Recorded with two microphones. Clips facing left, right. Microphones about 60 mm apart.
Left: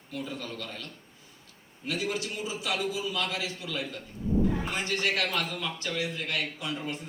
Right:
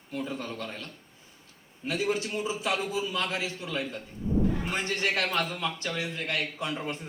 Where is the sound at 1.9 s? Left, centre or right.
Right.